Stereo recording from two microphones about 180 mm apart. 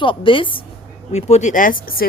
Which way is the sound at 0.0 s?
30° left (ahead or behind).